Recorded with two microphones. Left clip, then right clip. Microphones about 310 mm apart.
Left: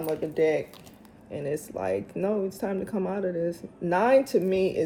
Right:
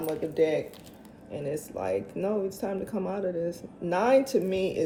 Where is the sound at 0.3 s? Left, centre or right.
Left.